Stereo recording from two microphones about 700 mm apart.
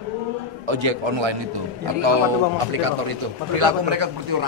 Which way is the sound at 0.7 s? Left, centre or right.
Right.